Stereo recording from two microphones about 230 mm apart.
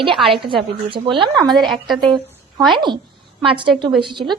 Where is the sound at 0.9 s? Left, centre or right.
Right.